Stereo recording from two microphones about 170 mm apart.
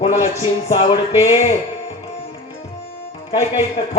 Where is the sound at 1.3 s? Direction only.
35° left (ahead or behind).